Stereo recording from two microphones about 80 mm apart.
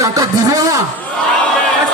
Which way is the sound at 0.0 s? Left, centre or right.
Right.